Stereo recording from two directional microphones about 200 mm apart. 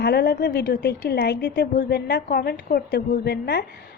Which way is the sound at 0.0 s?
55° left (ahead or behind).